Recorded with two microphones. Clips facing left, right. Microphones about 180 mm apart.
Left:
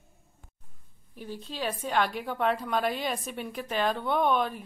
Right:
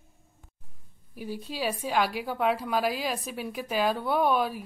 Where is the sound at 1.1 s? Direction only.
10° right (ahead or behind).